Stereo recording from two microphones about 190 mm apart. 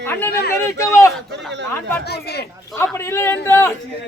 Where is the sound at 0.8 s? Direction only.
15° left (ahead or behind).